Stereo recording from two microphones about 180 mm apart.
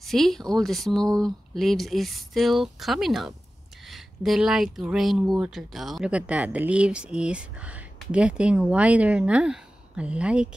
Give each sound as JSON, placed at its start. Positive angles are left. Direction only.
{"t": 0.0, "sound": "speech", "side_deg": 0}